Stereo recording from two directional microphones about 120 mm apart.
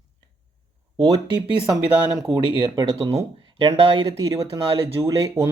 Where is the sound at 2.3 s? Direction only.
55° right (ahead or behind).